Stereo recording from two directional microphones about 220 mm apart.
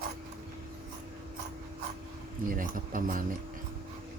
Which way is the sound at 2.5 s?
40° right (ahead or behind).